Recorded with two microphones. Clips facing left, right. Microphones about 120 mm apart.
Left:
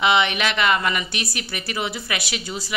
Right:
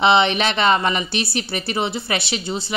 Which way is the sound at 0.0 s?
30° right (ahead or behind).